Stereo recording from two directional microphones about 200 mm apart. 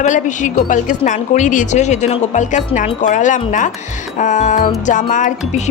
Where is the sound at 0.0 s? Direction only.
40° left (ahead or behind).